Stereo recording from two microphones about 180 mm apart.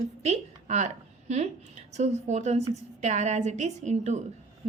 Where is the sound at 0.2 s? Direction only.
40° right (ahead or behind).